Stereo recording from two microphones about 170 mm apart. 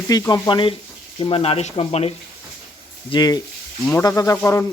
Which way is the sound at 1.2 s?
30° left (ahead or behind).